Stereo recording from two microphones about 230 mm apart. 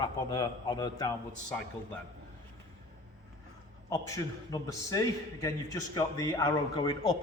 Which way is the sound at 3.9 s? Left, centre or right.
Centre.